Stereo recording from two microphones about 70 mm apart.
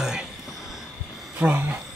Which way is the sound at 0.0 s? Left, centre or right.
Centre.